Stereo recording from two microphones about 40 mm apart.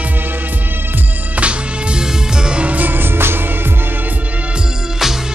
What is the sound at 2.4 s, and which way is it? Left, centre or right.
Music, right.